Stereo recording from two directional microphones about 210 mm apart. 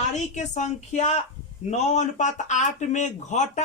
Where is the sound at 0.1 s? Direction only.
35° left (ahead or behind).